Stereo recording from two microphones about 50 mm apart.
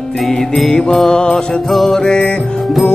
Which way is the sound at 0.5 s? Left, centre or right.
Centre.